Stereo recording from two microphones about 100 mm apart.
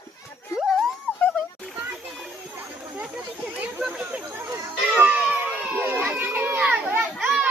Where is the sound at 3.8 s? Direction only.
10° right (ahead or behind).